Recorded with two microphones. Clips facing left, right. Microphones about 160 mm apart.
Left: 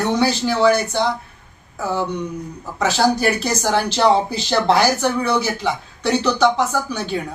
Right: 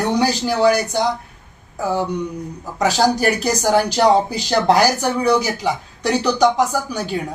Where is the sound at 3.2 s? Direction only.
15° right (ahead or behind).